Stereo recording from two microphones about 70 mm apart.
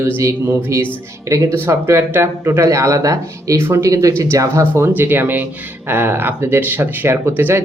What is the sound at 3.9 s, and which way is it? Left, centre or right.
Speech, right.